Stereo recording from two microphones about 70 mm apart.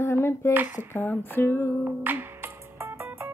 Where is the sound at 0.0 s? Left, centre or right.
Left.